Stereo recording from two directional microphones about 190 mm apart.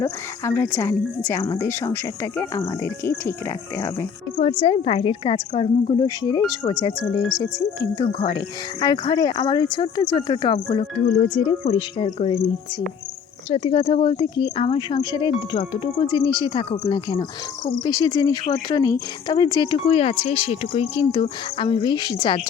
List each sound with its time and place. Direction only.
0.0 s speech: 15° left (ahead or behind)
4.6 s speech: 30° left (ahead or behind)
7.2 s speech: centre (ahead or behind)
7.8 s speech: 25° left (ahead or behind)
13.5 s speech: 30° left (ahead or behind)